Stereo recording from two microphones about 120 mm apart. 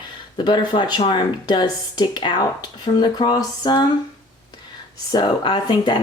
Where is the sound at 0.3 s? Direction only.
40° left (ahead or behind).